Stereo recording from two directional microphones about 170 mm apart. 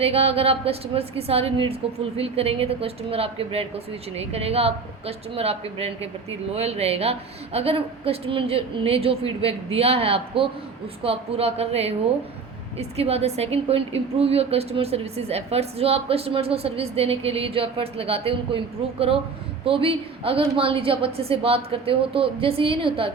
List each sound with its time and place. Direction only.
0.0 s a woman's voice: 35° right (ahead or behind)